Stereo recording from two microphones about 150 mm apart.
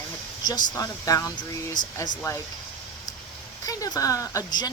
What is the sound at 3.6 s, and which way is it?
Speech, 25° left (ahead or behind).